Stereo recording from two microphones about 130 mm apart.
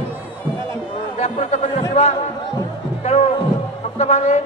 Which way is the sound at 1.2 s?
60° left (ahead or behind).